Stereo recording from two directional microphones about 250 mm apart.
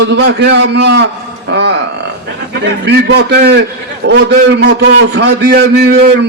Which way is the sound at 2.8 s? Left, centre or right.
Right.